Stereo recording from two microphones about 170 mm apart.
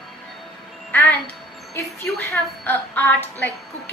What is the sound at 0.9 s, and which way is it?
Speech, 10° left (ahead or behind).